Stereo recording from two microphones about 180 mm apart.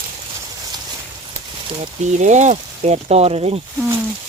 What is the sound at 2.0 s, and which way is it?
Speech, 40° right (ahead or behind).